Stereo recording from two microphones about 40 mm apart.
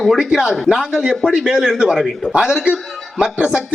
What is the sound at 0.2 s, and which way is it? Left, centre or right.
A man's voice, centre.